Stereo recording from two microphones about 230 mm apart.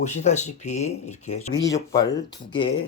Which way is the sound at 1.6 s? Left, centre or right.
Centre.